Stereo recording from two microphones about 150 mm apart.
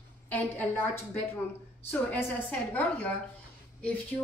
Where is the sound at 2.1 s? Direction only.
10° left (ahead or behind).